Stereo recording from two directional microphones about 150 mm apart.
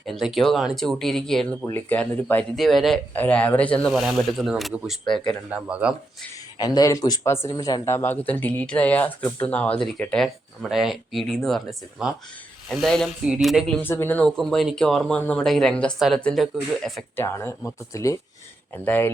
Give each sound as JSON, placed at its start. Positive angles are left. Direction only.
{"t": 0.0, "sound": "speech", "side_deg": 0}
{"t": 1.6, "sound": "speech", "side_deg": 15}
{"t": 6.6, "sound": "speech", "side_deg": 25}
{"t": 13.8, "sound": "speech", "side_deg": 15}
{"t": 17.2, "sound": "speech", "side_deg": 15}